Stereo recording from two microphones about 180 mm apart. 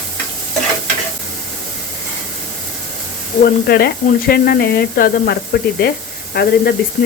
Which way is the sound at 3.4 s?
55° left (ahead or behind).